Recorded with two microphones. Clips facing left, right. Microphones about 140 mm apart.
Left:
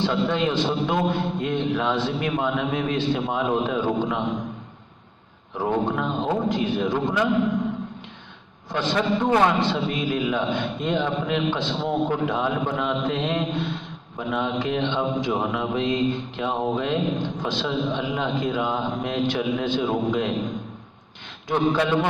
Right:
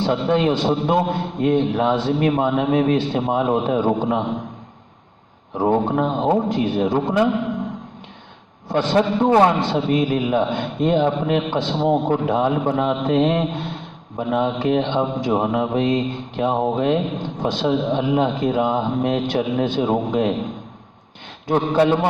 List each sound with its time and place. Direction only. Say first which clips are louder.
0.0 s a man's voice: right 4 dB; 45° right (ahead or behind)
5.6 s speech: right 5 dB; 35° right (ahead or behind)
6.7 s a man's voice: right 4 dB; 50° right (ahead or behind)
8.9 s speech: right 5 dB; 35° right (ahead or behind)
9.5 s a man's voice: right 4 dB; 50° right (ahead or behind)
21.5 s speech: right 5 dB; 40° right (ahead or behind)